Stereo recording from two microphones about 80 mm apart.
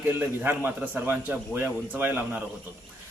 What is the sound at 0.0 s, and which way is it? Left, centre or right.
Speech, right.